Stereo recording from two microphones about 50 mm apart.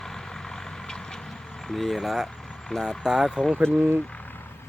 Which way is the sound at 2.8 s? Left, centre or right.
Centre.